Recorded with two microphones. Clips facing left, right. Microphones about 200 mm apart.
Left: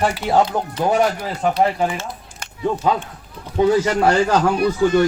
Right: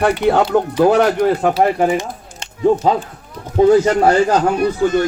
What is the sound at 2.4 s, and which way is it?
A man's voice, 25° right (ahead or behind).